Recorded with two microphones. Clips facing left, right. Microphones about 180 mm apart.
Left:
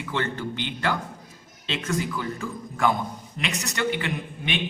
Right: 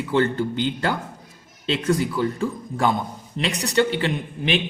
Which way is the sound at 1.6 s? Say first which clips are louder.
Right 6 dB; 35° right (ahead or behind).